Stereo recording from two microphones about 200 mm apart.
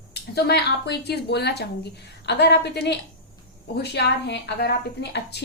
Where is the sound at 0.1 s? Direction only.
55° left (ahead or behind).